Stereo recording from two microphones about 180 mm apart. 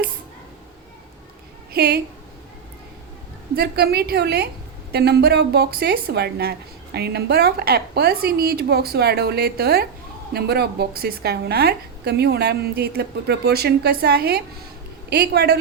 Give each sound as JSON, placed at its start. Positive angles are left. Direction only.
{"t": 1.7, "sound": "a woman's voice", "side_deg": -60}
{"t": 3.5, "sound": "a woman's voice", "side_deg": -60}